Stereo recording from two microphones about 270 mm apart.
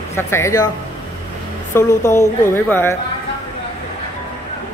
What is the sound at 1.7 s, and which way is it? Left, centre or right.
A woman's voice, centre.